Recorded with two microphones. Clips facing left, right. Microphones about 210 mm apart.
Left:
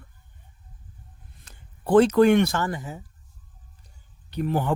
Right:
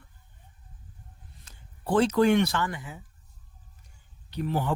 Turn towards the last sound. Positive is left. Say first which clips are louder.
# left 4 dB
turn(degrees=50)  # may be behind; listen again after turning